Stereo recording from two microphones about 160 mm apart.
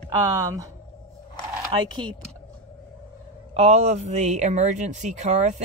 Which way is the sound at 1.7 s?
30° right (ahead or behind).